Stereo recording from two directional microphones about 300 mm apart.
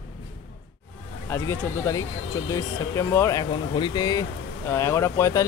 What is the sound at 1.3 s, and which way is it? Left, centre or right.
Speech, centre.